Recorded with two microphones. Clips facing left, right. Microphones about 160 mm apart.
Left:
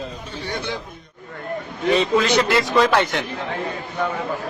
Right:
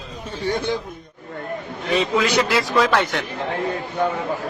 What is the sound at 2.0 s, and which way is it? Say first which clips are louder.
A man's voice: even; 5° right (ahead or behind).